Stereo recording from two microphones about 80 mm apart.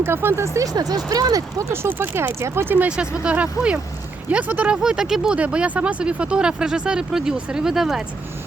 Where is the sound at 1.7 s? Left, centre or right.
Right.